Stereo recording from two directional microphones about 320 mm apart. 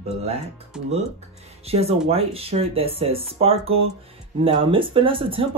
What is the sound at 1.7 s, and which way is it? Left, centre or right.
Speech, centre.